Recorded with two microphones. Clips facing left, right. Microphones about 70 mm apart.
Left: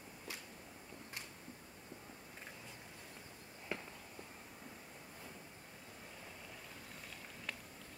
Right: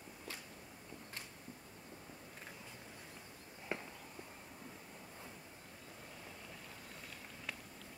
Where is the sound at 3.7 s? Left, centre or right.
Centre.